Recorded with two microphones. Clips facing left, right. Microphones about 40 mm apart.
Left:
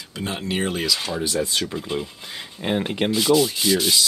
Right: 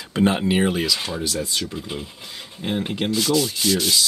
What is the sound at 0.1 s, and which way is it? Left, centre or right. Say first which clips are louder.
Speech: right 8 dB; right.